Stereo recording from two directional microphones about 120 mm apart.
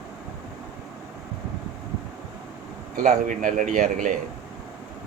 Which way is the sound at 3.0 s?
90° right.